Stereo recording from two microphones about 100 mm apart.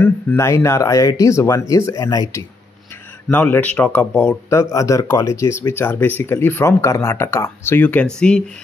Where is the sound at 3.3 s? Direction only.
15° left (ahead or behind).